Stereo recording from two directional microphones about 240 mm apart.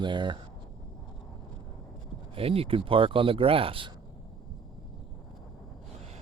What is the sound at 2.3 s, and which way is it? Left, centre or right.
Speech, right.